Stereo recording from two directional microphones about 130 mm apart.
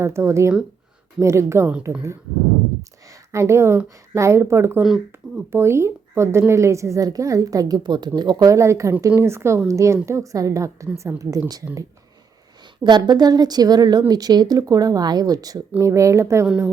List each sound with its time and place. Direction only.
0.0 s a woman's voice: 20° right (ahead or behind)
3.1 s a woman's voice: 20° right (ahead or behind)